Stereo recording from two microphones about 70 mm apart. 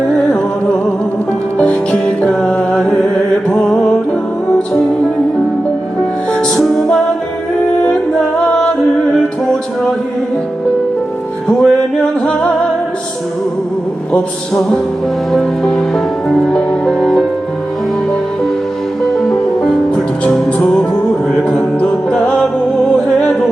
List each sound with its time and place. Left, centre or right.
0.3 s music: centre
4.5 s music: centre
6.6 s music: centre
11.4 s music: centre
14.1 s a sound: centre
15.3 s music: centre
19.1 s music: centre